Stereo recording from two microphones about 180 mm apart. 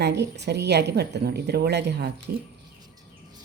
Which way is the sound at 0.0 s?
70° right (ahead or behind).